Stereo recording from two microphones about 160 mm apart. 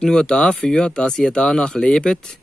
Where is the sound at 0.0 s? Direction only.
5° left (ahead or behind).